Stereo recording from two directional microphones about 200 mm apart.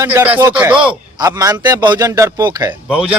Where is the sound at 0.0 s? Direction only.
10° right (ahead or behind).